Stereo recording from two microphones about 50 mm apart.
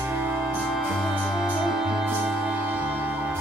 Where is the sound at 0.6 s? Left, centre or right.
Centre.